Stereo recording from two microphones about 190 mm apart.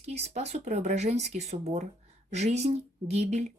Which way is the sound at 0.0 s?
35° right (ahead or behind).